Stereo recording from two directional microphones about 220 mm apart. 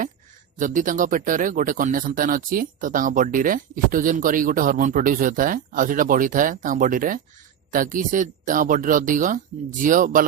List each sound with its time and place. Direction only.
0.6 s speech: 35° right (ahead or behind)